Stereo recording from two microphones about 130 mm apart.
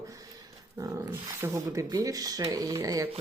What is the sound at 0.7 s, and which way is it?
Speech, 25° right (ahead or behind).